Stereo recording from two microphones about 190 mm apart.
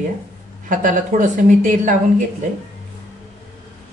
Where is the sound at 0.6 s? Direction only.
45° right (ahead or behind).